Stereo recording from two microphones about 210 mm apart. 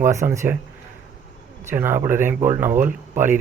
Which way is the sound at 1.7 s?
10° right (ahead or behind).